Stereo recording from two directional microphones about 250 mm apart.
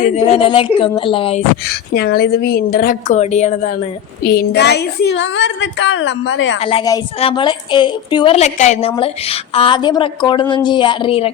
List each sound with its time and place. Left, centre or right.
0.0 s a woman's voice: left
1.9 s a woman's voice: left
4.2 s a woman's voice: left
6.7 s a woman's voice: centre